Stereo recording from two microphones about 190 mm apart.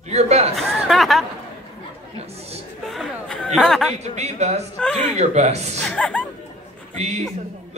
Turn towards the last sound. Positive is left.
turn(degrees=-35)  # may be behind; listen again after turning